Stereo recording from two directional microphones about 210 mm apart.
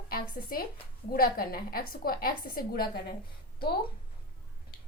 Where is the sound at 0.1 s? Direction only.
45° left (ahead or behind).